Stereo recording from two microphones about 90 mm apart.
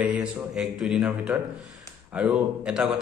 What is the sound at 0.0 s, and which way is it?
A man's voice, 5° right (ahead or behind).